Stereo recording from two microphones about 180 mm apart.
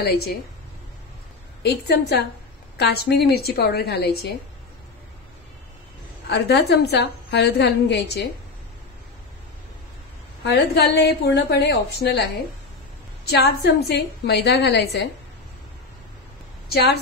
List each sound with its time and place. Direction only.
1.6 s a woman's voice: 65° left (ahead or behind)
6.2 s a woman's voice: 65° left (ahead or behind)
10.5 s a woman's voice: 65° left (ahead or behind)
16.6 s a woman's voice: 60° left (ahead or behind)